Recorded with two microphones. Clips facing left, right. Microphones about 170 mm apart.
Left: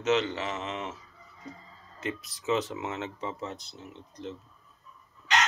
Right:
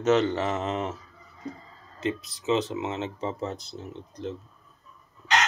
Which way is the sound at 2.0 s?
25° right (ahead or behind).